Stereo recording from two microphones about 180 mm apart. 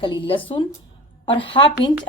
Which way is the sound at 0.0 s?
30° left (ahead or behind).